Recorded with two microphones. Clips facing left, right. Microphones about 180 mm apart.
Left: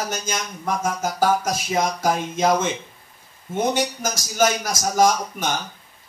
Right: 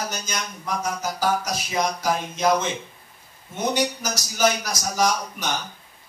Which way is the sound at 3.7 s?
50° left (ahead or behind).